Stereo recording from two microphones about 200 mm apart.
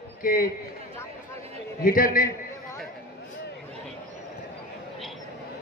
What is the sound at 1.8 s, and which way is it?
Speech, 45° left (ahead or behind).